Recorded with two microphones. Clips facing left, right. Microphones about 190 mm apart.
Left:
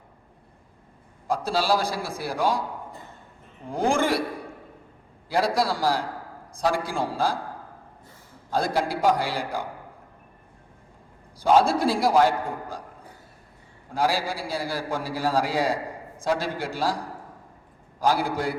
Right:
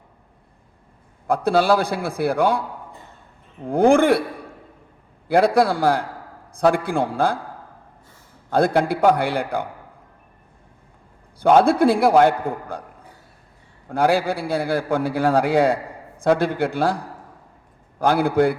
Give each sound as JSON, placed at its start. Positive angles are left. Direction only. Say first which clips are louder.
{"t": 1.3, "sound": "a man's voice", "louder": "right 6 dB", "side_deg": -60}
{"t": 3.7, "sound": "a man's voice", "louder": "right 8 dB", "side_deg": -60}
{"t": 5.3, "sound": "a man's voice", "louder": "right 7 dB", "side_deg": -60}
{"t": 8.4, "sound": "a man's voice", "louder": "right 7 dB", "side_deg": -60}
{"t": 11.3, "sound": "a man's voice", "louder": "right 5 dB", "side_deg": -60}
{"t": 13.9, "sound": "a man's voice", "louder": "right 6 dB", "side_deg": -60}
{"t": 18.0, "sound": "a man's voice", "louder": "right 7 dB", "side_deg": -60}